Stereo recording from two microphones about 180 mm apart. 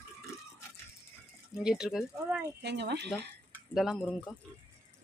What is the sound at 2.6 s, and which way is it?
Speech, 70° right (ahead or behind).